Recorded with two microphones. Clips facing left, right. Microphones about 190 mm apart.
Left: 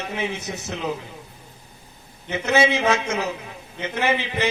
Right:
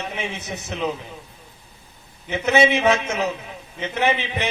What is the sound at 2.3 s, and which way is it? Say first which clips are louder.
A man's voice: right 2 dB; 20° right (ahead or behind).